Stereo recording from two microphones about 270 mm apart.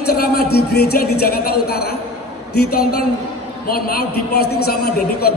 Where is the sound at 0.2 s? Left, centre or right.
Left.